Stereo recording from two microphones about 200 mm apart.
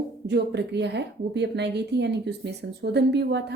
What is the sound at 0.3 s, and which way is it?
Speech, 60° right (ahead or behind).